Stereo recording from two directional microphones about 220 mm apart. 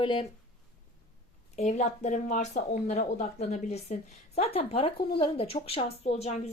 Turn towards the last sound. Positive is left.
turn(degrees=30)  # may be behind; listen again after turning